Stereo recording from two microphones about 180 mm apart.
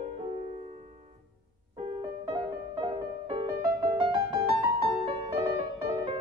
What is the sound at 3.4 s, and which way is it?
Music, 25° right (ahead or behind).